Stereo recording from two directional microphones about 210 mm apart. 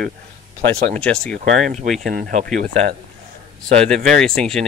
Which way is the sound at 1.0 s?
5° left (ahead or behind).